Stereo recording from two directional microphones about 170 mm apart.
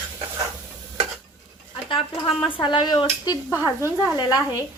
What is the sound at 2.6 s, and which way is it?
Speech, 30° left (ahead or behind).